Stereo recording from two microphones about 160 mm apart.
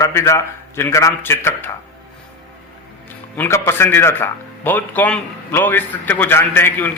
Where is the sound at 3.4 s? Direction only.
15° left (ahead or behind).